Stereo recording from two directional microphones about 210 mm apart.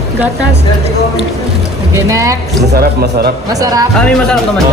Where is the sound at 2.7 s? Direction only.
50° right (ahead or behind).